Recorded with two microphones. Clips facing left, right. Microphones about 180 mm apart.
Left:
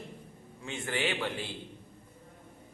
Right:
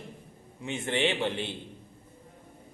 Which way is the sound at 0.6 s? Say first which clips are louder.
Right 5 dB; 20° right (ahead or behind).